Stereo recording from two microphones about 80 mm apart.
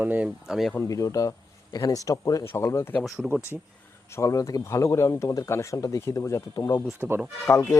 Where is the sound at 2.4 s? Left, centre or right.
Left.